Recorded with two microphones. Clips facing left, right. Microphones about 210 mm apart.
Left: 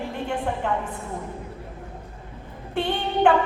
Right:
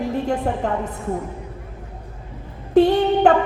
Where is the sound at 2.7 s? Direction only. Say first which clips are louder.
Right 11 dB; 40° right (ahead or behind).